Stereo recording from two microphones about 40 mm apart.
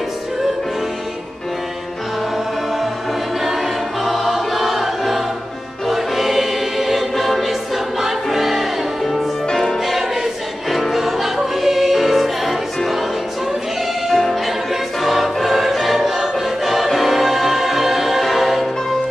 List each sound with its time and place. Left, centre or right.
4.0 s choir: centre
9.5 s music: centre
10.7 s music: centre
14.0 s music: centre
14.7 s choir: centre